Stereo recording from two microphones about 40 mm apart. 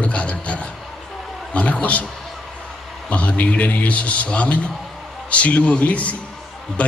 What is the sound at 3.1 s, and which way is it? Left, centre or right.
Speech, left.